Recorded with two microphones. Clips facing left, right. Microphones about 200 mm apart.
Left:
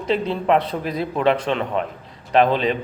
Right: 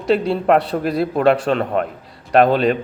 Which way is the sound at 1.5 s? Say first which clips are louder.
Right 4 dB; 45° right (ahead or behind).